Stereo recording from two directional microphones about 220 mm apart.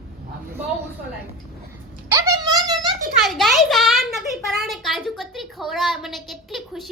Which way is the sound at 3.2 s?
Centre (ahead or behind).